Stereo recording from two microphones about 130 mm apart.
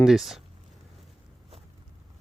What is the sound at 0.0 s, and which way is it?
Speech, centre (ahead or behind).